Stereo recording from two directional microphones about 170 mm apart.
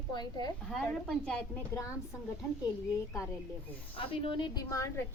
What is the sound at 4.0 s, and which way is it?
Speech, 30° left (ahead or behind).